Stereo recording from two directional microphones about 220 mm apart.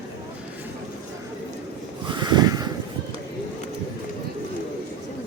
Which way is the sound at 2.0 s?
20° right (ahead or behind).